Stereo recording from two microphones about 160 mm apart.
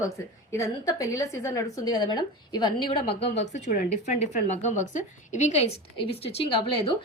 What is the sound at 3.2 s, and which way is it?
A woman's voice, 40° left (ahead or behind).